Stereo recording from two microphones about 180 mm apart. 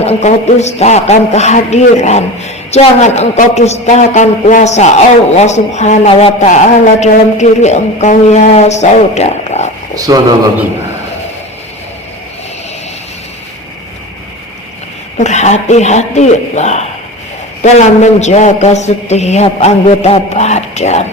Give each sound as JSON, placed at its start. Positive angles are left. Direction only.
{"t": 0.0, "sound": "speech", "side_deg": 35}
{"t": 9.9, "sound": "speech", "side_deg": -20}
{"t": 15.2, "sound": "speech", "side_deg": 40}